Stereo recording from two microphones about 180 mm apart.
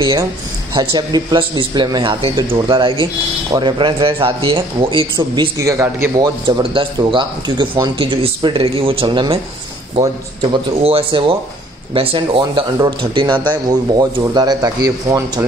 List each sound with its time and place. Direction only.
0.0 s a man's voice: 20° right (ahead or behind)
10.5 s a man's voice: 30° right (ahead or behind)